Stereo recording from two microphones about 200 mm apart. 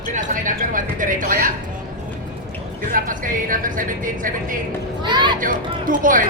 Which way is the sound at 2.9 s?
40° right (ahead or behind).